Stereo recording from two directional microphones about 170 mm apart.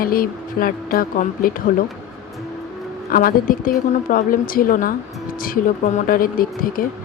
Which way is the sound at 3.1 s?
55° left (ahead or behind).